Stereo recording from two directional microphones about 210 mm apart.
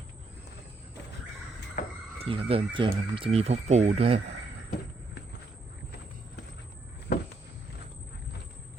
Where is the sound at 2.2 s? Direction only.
25° right (ahead or behind).